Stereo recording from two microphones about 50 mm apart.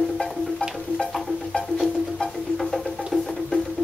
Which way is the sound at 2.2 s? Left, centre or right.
Centre.